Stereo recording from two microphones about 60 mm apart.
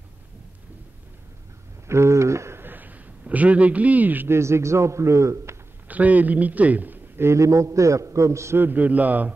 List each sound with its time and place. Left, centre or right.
1.9 s a sound: right
2.6 s a sound: right
4.3 s a man's voice: right
5.9 s a man's voice: right
7.2 s a man's voice: right
8.5 s a man's voice: right